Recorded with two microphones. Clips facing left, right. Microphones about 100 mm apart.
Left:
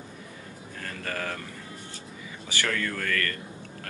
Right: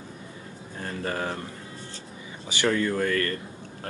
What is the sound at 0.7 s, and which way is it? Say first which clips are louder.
Speech: right 4 dB; 25° right (ahead or behind).